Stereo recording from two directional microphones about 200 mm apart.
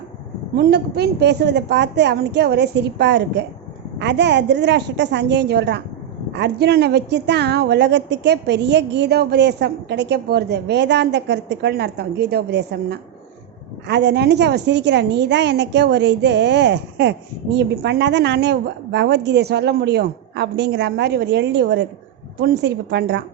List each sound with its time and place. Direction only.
0.5 s a woman's voice: 55° right (ahead or behind)